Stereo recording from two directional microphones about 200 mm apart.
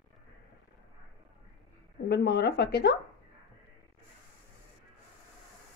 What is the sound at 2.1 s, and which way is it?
Speech, 55° left (ahead or behind).